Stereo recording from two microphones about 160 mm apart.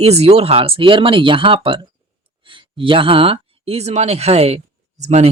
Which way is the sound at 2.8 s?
35° right (ahead or behind).